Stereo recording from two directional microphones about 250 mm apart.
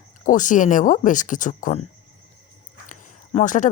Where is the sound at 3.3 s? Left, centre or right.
Left.